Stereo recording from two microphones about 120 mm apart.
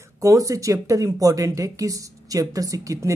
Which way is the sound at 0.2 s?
25° right (ahead or behind).